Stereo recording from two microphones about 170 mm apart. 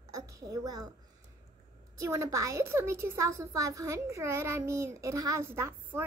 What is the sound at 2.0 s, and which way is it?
A woman's voice, 15° right (ahead or behind).